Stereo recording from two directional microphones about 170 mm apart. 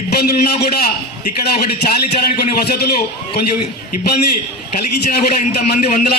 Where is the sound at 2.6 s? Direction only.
70° left (ahead or behind).